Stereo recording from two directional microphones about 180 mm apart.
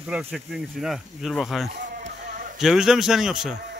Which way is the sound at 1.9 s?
50° right (ahead or behind).